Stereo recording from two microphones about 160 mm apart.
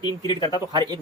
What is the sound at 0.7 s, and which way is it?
Speech, 25° right (ahead or behind).